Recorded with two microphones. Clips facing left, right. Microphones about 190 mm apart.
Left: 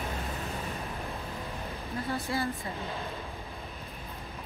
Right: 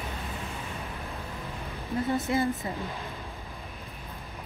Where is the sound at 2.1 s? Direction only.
20° right (ahead or behind).